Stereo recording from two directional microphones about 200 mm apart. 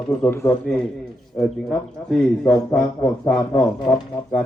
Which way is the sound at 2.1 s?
Centre (ahead or behind).